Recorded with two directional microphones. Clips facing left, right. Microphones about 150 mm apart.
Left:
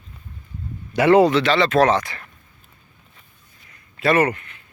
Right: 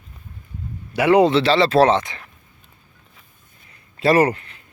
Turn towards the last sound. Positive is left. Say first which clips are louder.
# right 2 dB
turn(degrees=-35)  # may be behind; listen again after turning